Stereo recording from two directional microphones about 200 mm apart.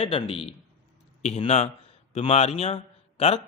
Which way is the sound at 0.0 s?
25° left (ahead or behind).